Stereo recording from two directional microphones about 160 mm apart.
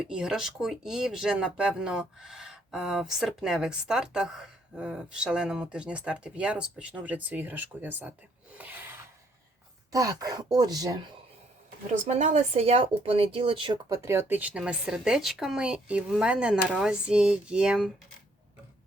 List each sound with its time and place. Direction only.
0.0 s speech: 5° right (ahead or behind)
8.5 s rub: 10° right (ahead or behind)
9.9 s speech: 20° right (ahead or behind)
12.0 s speech: 45° right (ahead or behind)
14.0 s speech: 15° right (ahead or behind)